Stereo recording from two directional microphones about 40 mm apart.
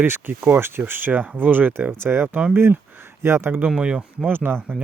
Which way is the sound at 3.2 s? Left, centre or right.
Right.